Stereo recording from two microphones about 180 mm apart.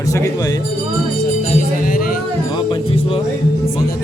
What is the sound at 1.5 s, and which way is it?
Music, 50° left (ahead or behind).